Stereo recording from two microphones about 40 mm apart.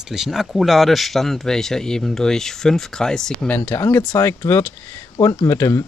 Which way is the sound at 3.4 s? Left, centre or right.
Left.